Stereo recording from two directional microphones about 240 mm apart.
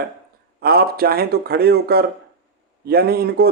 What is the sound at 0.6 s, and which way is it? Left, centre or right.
Speech, right.